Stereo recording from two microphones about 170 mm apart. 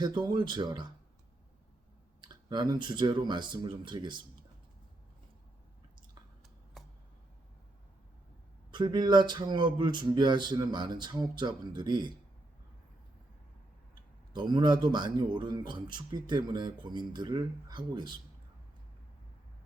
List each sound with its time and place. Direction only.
0.0 s speech: 25° right (ahead or behind)
2.2 s speech: 25° right (ahead or behind)
8.7 s speech: 25° right (ahead or behind)
14.3 s speech: 25° right (ahead or behind)